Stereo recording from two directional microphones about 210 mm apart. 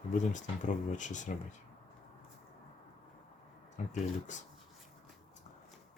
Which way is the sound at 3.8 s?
35° left (ahead or behind).